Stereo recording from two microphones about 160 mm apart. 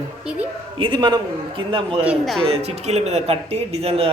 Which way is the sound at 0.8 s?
30° right (ahead or behind).